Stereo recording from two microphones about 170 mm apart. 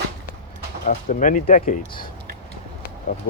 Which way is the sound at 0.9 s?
50° left (ahead or behind).